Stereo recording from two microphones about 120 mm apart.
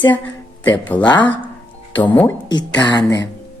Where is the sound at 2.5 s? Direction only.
35° left (ahead or behind).